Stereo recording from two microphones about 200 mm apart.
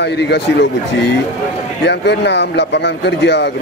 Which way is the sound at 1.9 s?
60° left (ahead or behind).